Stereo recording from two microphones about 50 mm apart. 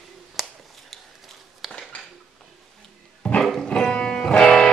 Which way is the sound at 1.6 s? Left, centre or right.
Centre.